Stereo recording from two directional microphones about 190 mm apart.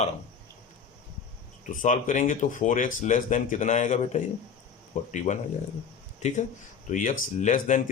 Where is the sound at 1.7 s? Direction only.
40° left (ahead or behind).